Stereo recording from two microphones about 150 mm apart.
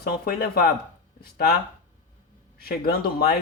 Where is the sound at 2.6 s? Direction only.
90° left.